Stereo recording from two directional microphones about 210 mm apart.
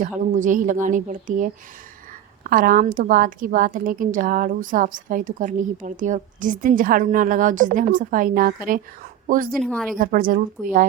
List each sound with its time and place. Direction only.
0.3 s a woman's voice: 40° right (ahead or behind)
9.6 s speech: 5° left (ahead or behind)
10.0 s a woman's voice: 40° right (ahead or behind)